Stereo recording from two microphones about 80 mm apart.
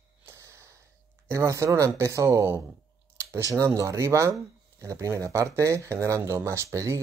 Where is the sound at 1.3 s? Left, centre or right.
Right.